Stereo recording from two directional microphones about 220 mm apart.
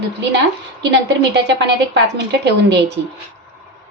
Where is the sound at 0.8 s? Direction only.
55° right (ahead or behind).